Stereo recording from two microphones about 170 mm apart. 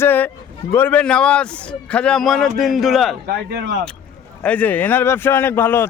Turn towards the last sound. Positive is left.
turn(degrees=15)  # may be behind; listen again after turning